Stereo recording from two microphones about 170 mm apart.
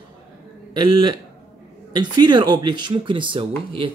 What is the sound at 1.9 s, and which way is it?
Speech, 25° right (ahead or behind).